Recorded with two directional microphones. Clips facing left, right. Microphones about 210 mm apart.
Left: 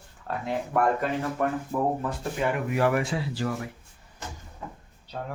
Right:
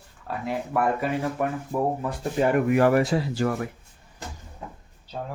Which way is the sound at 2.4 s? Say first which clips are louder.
Right 6 dB; 40° right (ahead or behind).